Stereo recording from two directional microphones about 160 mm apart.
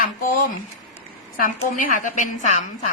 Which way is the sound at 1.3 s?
60° left (ahead or behind).